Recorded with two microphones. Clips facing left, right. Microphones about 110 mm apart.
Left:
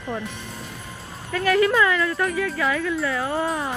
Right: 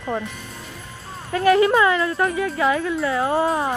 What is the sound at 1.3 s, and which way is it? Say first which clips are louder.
Speech: right 4 dB; 30° right (ahead or behind).